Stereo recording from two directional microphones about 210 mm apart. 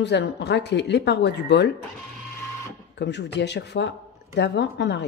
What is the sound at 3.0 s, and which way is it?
A woman's voice, 55° left (ahead or behind).